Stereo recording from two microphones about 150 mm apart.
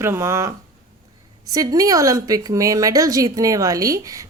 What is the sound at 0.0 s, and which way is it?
Speech, 15° right (ahead or behind).